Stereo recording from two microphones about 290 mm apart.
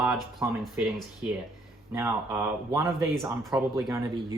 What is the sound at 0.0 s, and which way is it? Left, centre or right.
Speech, centre.